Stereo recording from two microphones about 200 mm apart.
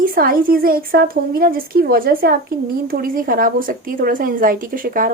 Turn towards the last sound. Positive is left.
turn(degrees=-45)  # may be behind; listen again after turning